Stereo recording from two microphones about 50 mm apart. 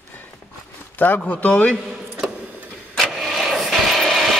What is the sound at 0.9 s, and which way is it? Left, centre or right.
Speech, left.